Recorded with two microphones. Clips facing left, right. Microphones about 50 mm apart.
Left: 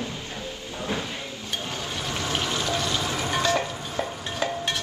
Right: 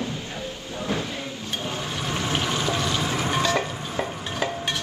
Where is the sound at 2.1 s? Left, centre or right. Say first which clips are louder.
Right 2 dB; right.